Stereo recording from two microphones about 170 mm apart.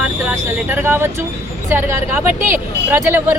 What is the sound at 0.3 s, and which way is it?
Speech, 10° right (ahead or behind).